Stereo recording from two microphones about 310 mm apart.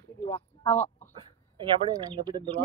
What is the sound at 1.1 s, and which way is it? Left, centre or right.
Speech, centre.